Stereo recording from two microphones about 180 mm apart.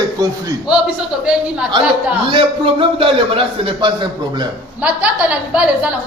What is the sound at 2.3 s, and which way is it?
A man's voice, 30° right (ahead or behind).